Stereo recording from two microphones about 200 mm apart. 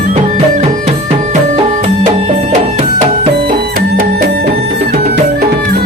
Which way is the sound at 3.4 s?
50° right (ahead or behind).